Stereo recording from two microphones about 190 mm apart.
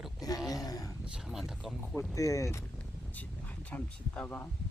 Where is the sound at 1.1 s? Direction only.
5° right (ahead or behind).